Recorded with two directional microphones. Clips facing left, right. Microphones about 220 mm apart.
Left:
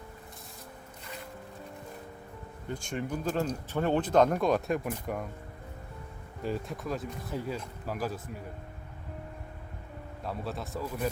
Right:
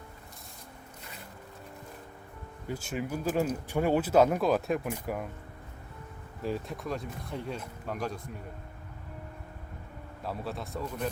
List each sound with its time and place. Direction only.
2.6 s speech: 5° right (ahead or behind)
6.4 s speech: centre (ahead or behind)
10.2 s speech: centre (ahead or behind)